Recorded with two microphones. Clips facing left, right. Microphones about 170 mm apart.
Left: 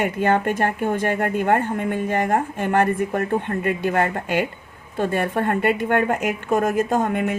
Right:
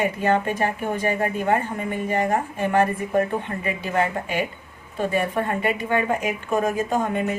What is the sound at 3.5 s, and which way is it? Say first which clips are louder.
Speech: left 5 dB; 55° left (ahead or behind).